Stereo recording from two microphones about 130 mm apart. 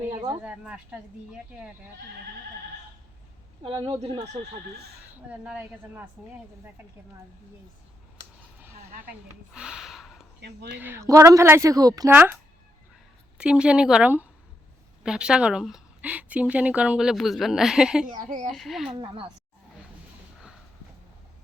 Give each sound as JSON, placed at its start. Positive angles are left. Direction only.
{"t": 0.4, "sound": "speech", "side_deg": -10}
{"t": 3.8, "sound": "speech", "side_deg": -40}
{"t": 5.3, "sound": "speech", "side_deg": -10}
{"t": 9.6, "sound": "a sound", "side_deg": -5}
{"t": 10.8, "sound": "speech", "side_deg": -15}
{"t": 12.1, "sound": "speech", "side_deg": -15}
{"t": 13.4, "sound": "speech", "side_deg": -5}
{"t": 18.2, "sound": "speech", "side_deg": -65}
{"t": 18.5, "sound": "speech", "side_deg": 0}
{"t": 18.9, "sound": "speech", "side_deg": -40}